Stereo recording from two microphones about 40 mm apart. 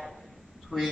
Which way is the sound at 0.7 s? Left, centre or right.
Centre.